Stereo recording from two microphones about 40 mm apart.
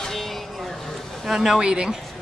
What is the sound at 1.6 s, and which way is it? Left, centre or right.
Speech, centre.